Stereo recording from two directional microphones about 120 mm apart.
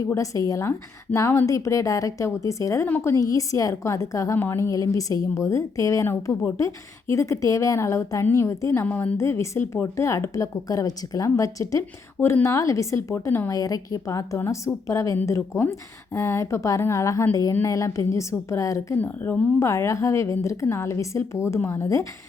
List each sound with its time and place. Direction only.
0.1 s a woman's voice: 30° left (ahead or behind)
18.9 s a woman's voice: 15° left (ahead or behind)